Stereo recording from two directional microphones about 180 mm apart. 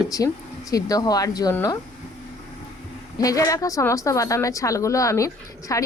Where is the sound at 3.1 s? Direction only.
20° left (ahead or behind).